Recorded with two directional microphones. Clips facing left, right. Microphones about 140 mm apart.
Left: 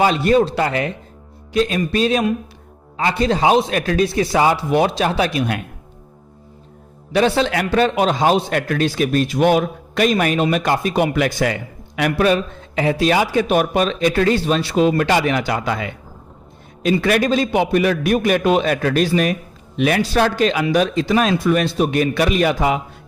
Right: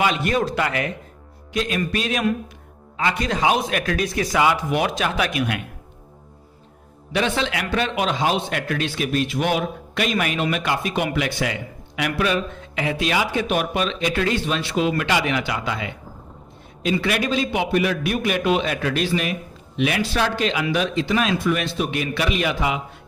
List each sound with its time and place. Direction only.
0.0 s a man's voice: 35° left (ahead or behind)
7.1 s a man's voice: 35° left (ahead or behind)
17.0 s a man's voice: 45° left (ahead or behind)